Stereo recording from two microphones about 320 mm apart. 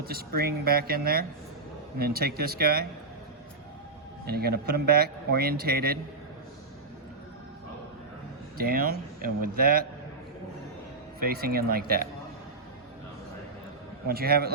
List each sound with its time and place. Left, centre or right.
0.0 s a man's voice: right
4.3 s a man's voice: right
8.5 s a man's voice: right
11.2 s a man's voice: right
14.1 s a man's voice: right